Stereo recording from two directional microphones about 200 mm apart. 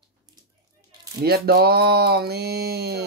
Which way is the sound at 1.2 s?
50° right (ahead or behind).